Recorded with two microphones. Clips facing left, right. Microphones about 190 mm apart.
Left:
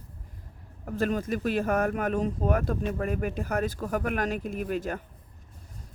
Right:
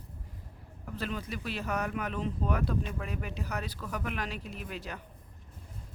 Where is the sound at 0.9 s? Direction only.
50° left (ahead or behind).